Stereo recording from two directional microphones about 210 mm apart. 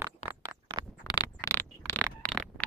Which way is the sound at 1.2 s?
10° left (ahead or behind).